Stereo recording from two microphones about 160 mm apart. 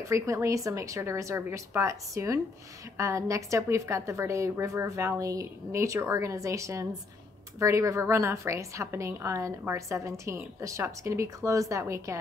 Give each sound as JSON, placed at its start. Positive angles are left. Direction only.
{"t": 0.1, "sound": "a woman's voice", "side_deg": -20}